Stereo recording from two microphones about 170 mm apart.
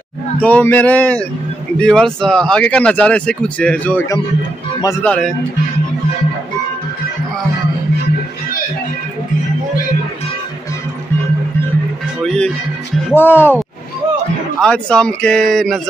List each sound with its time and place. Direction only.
0.4 s speech: 10° left (ahead or behind)
12.2 s music: 5° left (ahead or behind)
13.1 s speech: 15° left (ahead or behind)
14.6 s speech: 5° left (ahead or behind)